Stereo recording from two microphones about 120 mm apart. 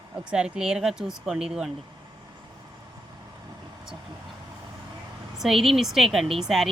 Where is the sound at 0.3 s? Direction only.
5° right (ahead or behind).